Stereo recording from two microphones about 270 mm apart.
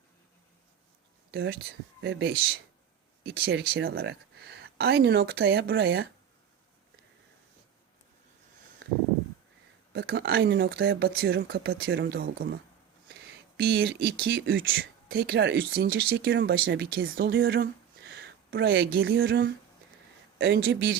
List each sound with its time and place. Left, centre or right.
1.3 s speech: right
9.9 s speech: right